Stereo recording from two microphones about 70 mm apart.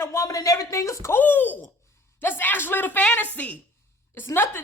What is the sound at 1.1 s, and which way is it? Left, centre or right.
Speech, left.